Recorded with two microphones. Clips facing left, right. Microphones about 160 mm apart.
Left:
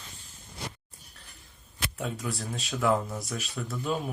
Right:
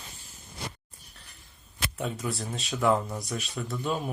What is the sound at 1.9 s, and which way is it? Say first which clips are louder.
Speech: right 2 dB; centre (ahead or behind).